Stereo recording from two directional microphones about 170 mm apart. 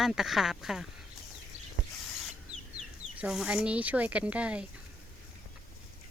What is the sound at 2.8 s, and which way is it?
Speech, 5° right (ahead or behind).